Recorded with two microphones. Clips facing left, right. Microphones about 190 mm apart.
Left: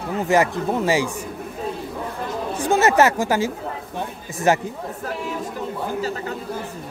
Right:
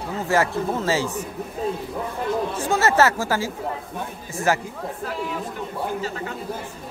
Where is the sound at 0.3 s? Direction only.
15° left (ahead or behind).